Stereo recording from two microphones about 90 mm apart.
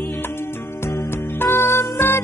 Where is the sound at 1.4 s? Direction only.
25° left (ahead or behind).